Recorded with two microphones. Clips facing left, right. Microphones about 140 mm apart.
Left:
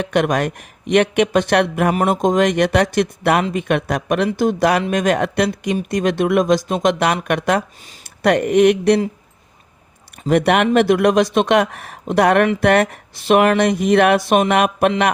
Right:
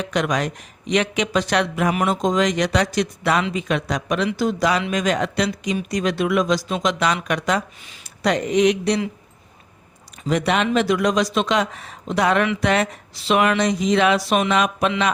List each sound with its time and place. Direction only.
0.0 s speech: 55° left (ahead or behind)
10.2 s speech: 55° left (ahead or behind)